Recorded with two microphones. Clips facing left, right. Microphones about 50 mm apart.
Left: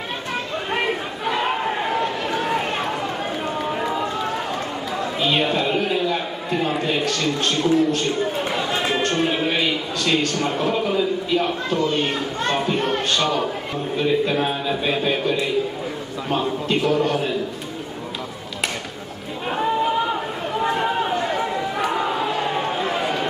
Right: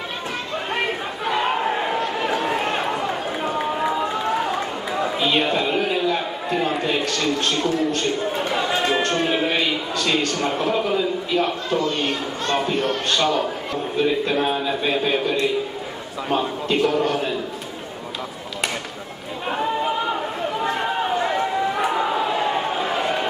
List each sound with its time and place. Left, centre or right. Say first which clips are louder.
0.7 s chatter: left 1 dB; centre
2.1 s run: right 2 dB; centre
2.4 s run: right 1 dB; centre
7.9 s speech: left 1 dB; centre
11.9 s speech: left 2 dB; centre
13.1 s speech: right 1 dB; centre
19.5 s chatter: left 2 dB; centre
22.4 s a sound: right 1 dB; centre